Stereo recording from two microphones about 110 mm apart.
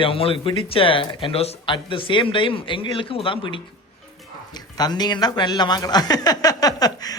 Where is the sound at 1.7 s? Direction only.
50° left (ahead or behind).